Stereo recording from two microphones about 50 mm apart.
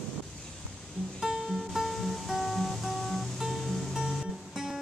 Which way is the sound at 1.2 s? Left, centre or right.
Centre.